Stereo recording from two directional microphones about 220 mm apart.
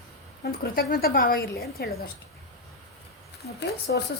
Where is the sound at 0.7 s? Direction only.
45° left (ahead or behind).